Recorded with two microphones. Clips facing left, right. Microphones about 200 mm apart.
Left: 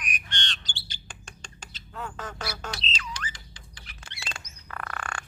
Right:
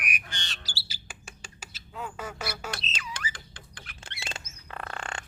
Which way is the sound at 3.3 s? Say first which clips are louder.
Right 3 dB; 55° right (ahead or behind).